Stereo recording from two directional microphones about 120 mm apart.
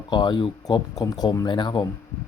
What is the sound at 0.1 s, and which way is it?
Speech, 40° left (ahead or behind).